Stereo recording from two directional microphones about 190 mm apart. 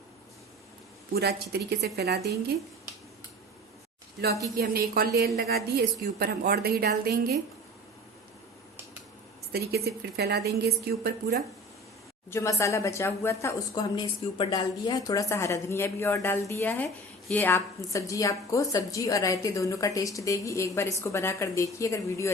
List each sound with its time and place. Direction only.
1.1 s a woman's voice: 55° right (ahead or behind)
4.5 s a woman's voice: 55° right (ahead or behind)
9.5 s a woman's voice: 55° right (ahead or behind)
12.3 s speech: 15° left (ahead or behind)